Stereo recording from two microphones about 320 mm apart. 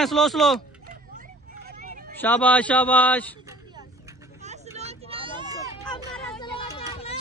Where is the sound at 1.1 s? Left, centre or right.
Right.